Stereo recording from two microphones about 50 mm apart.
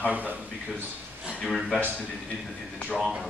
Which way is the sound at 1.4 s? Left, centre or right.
Centre.